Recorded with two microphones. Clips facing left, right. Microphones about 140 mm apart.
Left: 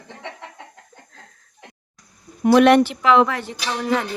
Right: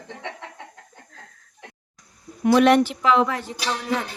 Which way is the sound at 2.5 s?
70° left (ahead or behind).